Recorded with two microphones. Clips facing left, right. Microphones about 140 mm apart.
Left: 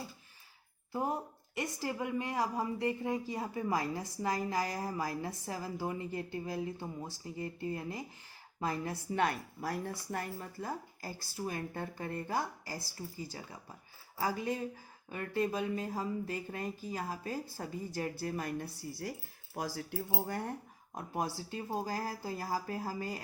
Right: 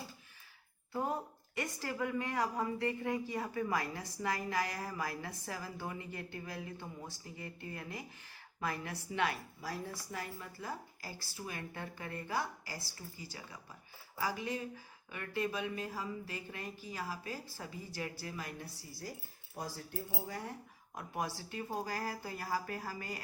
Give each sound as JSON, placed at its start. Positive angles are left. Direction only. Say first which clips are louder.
{"t": 0.9, "sound": "a woman's voice", "louder": "left 2 dB", "side_deg": 20}
{"t": 19.5, "sound": "speech", "louder": "left 5 dB", "side_deg": 85}
{"t": 20.2, "sound": "speech", "louder": "left 5 dB", "side_deg": 55}
{"t": 20.9, "sound": "a woman's voice", "louder": "left 3 dB", "side_deg": 30}